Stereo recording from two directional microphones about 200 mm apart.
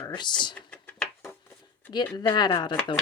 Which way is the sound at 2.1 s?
20° left (ahead or behind).